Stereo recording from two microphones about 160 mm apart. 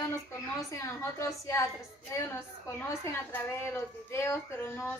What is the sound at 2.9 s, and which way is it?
A woman's voice, 15° left (ahead or behind).